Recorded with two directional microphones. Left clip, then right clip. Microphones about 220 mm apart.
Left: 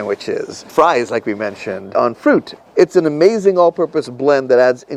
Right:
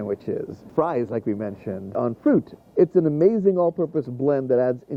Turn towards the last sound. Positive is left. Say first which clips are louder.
# left 9 dB
turn(degrees=5)  # may be behind; listen again after turning